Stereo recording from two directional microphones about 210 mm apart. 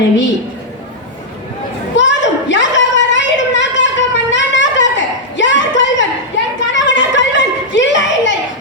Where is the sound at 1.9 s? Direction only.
60° left (ahead or behind).